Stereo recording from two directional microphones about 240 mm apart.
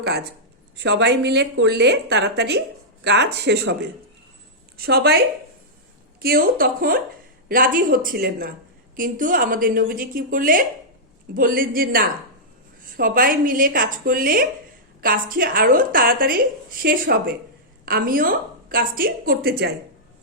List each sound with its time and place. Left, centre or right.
0.8 s a woman's voice: right
4.8 s a woman's voice: right